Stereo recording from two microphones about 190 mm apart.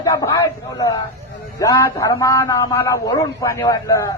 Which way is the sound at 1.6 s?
15° left (ahead or behind).